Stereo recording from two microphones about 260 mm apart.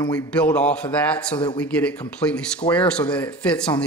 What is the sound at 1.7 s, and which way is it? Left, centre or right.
Speech, centre.